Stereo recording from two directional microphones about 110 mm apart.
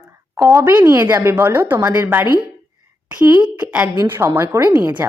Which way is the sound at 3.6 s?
10° right (ahead or behind).